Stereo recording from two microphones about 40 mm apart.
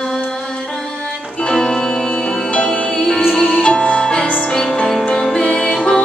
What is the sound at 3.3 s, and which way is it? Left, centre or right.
Music, centre.